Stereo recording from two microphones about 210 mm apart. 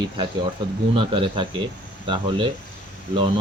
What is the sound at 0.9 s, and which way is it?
Speech, 25° right (ahead or behind).